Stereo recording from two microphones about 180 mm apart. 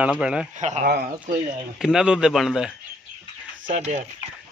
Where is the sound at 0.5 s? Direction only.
40° right (ahead or behind).